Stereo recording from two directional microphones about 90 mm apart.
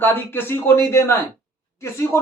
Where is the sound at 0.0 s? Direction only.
25° left (ahead or behind).